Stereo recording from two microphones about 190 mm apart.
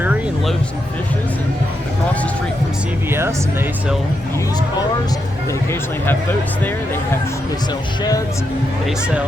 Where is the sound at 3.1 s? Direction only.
15° right (ahead or behind).